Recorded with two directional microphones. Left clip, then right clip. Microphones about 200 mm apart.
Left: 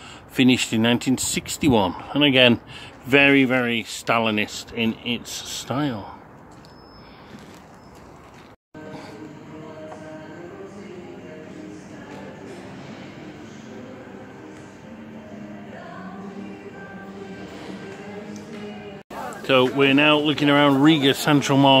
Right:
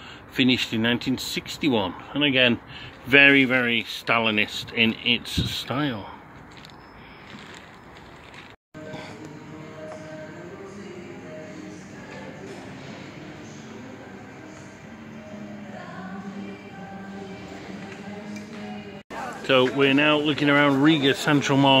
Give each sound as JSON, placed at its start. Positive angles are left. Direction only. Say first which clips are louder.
{"t": 0.3, "sound": "speech", "louder": "left 3 dB", "side_deg": 25}
{"t": 19.4, "sound": "speech", "louder": "left 2 dB", "side_deg": 10}